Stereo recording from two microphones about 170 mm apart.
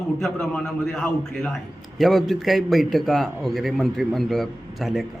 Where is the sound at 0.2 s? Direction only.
Centre (ahead or behind).